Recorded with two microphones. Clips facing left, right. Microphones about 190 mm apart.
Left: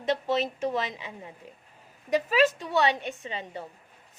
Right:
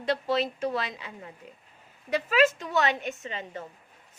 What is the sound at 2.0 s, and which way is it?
Speech, 35° left (ahead or behind).